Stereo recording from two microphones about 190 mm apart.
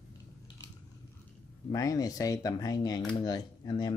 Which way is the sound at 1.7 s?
20° left (ahead or behind).